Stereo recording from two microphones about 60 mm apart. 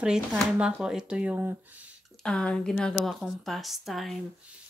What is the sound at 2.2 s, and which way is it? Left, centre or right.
Speech, centre.